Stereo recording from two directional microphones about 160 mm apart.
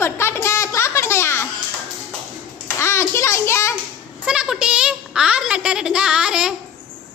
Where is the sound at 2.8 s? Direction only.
15° left (ahead or behind).